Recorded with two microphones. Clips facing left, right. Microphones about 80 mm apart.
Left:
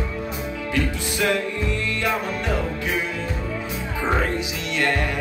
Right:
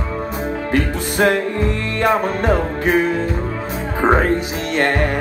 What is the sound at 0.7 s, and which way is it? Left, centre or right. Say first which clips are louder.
Music: right 6 dB; right.